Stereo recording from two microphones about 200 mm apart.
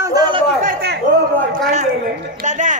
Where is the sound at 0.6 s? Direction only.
55° right (ahead or behind).